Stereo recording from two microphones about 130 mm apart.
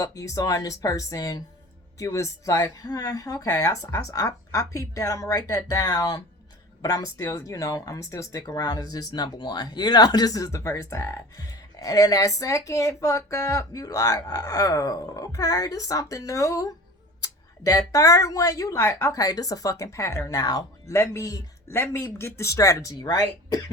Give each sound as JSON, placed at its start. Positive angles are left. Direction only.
{"t": 0.0, "sound": "speech", "side_deg": 25}